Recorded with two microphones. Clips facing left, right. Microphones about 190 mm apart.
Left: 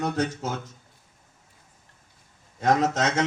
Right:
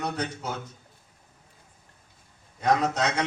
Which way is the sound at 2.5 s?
45° left (ahead or behind).